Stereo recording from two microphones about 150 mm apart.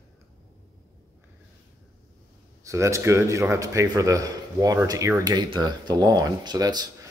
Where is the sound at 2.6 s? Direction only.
20° right (ahead or behind).